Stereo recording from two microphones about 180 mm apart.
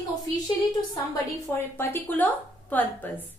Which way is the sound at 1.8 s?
10° left (ahead or behind).